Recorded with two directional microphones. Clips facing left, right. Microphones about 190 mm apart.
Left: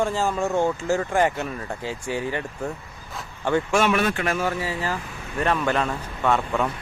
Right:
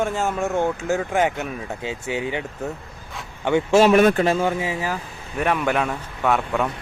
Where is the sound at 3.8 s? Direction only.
40° right (ahead or behind).